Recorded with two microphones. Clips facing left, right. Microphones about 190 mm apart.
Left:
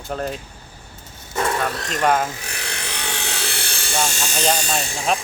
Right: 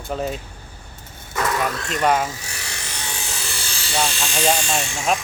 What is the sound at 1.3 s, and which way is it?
Vehicle, 30° left (ahead or behind).